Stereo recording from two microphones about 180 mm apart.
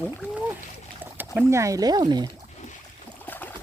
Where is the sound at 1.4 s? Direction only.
15° right (ahead or behind).